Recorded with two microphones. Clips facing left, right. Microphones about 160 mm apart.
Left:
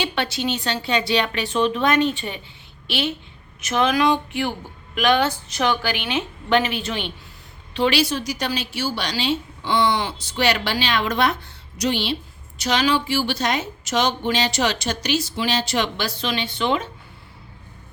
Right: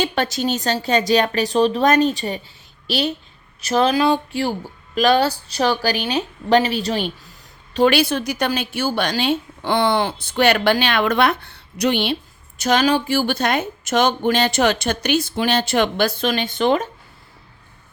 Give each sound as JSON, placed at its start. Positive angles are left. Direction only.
{"t": 0.0, "sound": "a woman's voice", "side_deg": -45}